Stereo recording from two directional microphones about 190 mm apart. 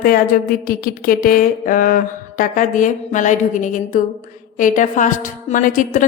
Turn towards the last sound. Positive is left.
turn(degrees=45)  # may be behind; listen again after turning